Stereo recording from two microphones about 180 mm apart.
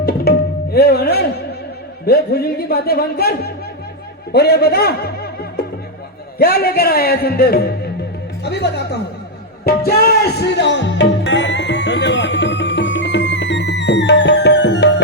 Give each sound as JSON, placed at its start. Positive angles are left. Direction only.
{"t": 0.0, "sound": "tabla", "side_deg": 60}
{"t": 2.0, "sound": "speech", "side_deg": 60}
{"t": 9.6, "sound": "music", "side_deg": 60}